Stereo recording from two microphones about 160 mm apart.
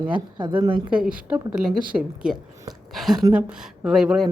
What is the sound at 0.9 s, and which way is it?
Speech, 5° right (ahead or behind).